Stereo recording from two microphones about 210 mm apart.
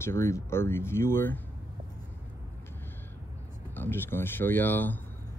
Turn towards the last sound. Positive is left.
turn(degrees=10)  # may be behind; listen again after turning